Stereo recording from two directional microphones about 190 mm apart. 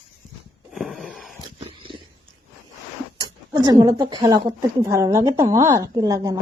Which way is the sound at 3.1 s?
20° right (ahead or behind).